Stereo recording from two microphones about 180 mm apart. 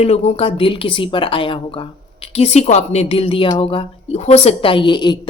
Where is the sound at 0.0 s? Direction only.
35° left (ahead or behind).